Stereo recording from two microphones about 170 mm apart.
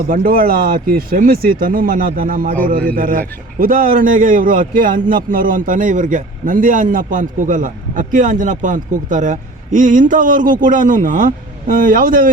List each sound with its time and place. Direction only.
0.1 s speech: 55° right (ahead or behind)